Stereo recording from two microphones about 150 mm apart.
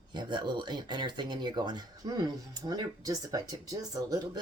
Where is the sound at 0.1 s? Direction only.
30° right (ahead or behind).